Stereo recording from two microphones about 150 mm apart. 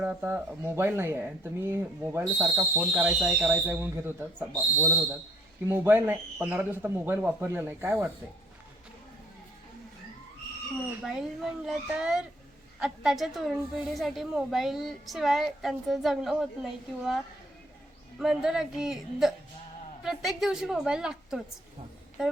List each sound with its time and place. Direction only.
0.0 s speech: 10° right (ahead or behind)
3.0 s a woman's voice: 5° right (ahead or behind)
3.5 s speech: 15° right (ahead or behind)
11.0 s a woman's voice: centre (ahead or behind)
18.2 s a woman's voice: 5° right (ahead or behind)